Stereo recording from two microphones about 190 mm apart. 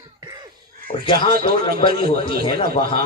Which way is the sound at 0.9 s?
40° left (ahead or behind).